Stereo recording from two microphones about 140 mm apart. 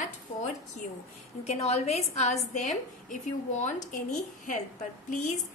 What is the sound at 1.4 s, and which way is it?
A woman's voice, 50° left (ahead or behind).